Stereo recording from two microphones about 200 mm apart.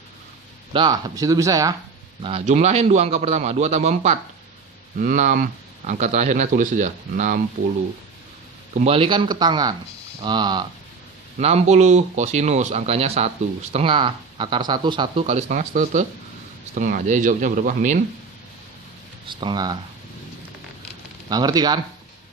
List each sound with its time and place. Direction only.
0.7 s speech: 20° right (ahead or behind)
2.2 s speech: 30° right (ahead or behind)
8.7 s speech: 30° right (ahead or behind)
11.3 s speech: 35° right (ahead or behind)
19.3 s speech: 25° right (ahead or behind)
21.2 s speech: 20° right (ahead or behind)